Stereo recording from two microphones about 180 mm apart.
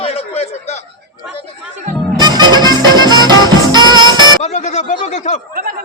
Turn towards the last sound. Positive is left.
turn(degrees=-55)  # may be behind; listen again after turning